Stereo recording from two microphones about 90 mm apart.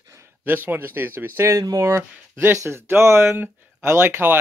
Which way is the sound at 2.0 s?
25° right (ahead or behind).